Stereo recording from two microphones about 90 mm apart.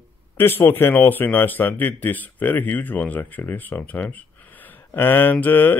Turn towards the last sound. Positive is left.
turn(degrees=20)  # may be behind; listen again after turning